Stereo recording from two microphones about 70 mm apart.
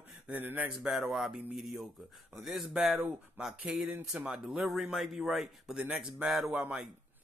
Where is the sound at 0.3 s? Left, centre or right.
Right.